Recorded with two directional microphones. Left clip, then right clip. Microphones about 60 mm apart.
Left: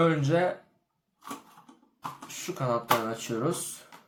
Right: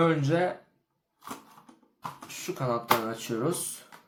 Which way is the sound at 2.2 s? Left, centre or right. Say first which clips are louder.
Even; left.